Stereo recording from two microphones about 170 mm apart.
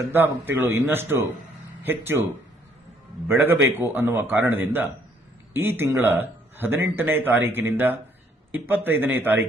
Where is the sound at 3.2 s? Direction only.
10° right (ahead or behind).